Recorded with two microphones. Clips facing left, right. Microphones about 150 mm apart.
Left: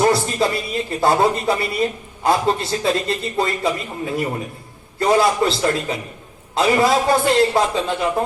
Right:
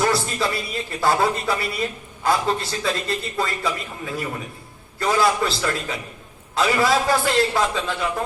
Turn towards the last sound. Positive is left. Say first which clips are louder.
# left 4 dB
turn(degrees=25)  # may be behind; listen again after turning